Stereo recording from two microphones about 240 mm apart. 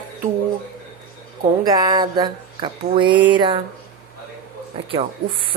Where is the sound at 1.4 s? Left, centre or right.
Centre.